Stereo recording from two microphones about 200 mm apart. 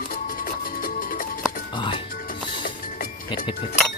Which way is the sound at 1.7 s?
25° left (ahead or behind).